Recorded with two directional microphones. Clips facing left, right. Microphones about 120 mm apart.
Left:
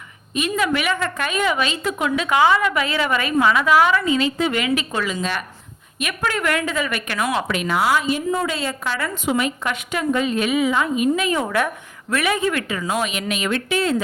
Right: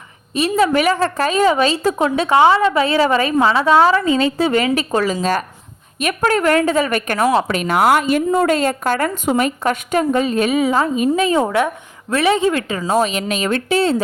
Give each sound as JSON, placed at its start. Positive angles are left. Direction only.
{"t": 0.3, "sound": "speech", "side_deg": -35}